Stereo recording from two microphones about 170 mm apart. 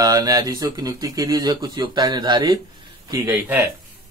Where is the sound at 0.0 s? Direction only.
20° right (ahead or behind).